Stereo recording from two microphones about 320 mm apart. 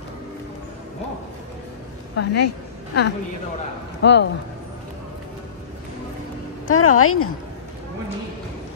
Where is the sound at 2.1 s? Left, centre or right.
Left.